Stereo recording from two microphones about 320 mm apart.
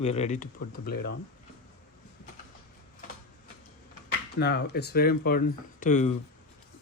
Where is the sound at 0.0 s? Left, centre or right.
Centre.